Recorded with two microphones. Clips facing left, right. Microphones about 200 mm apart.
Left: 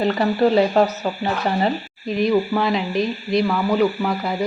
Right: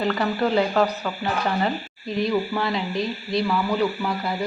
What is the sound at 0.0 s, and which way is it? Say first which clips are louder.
Speech: left 5 dB; 20° left (ahead or behind).